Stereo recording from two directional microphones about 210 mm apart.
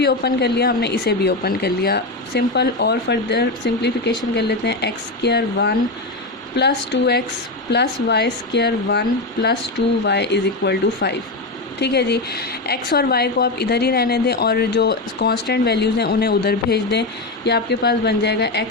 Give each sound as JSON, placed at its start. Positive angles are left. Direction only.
{"t": 0.0, "sound": "a woman's voice", "side_deg": 50}